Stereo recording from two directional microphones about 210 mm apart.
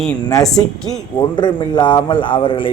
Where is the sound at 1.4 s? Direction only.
20° left (ahead or behind).